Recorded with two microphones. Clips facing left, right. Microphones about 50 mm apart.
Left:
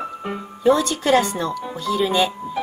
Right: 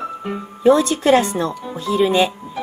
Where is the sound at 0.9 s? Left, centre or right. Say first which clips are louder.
Right 3 dB; right.